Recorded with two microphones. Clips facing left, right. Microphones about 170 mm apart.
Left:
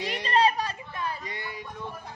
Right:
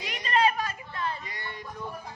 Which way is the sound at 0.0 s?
35° left (ahead or behind).